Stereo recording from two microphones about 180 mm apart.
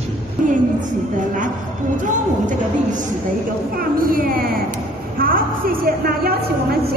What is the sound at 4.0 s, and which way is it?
Speech, 50° right (ahead or behind).